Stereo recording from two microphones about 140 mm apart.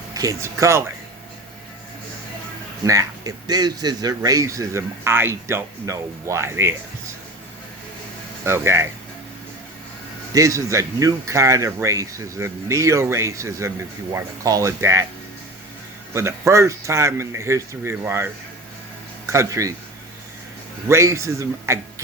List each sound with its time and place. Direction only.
0.1 s speech: 25° right (ahead or behind)
2.8 s speech: 25° right (ahead or behind)
8.4 s speech: 20° right (ahead or behind)
10.3 s speech: 20° right (ahead or behind)
16.1 s speech: 20° right (ahead or behind)
19.3 s speech: 20° right (ahead or behind)
20.8 s speech: 20° right (ahead or behind)